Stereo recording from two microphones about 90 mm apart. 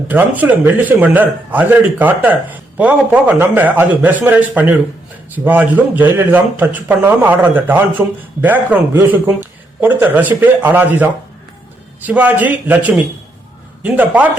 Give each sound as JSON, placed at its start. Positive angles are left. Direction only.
{"t": 0.1, "sound": "a man's voice", "side_deg": -20}